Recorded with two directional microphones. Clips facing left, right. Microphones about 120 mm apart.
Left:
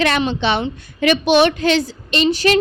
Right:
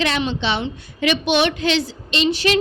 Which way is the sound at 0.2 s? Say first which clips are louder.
Left 4 dB; 50° left (ahead or behind).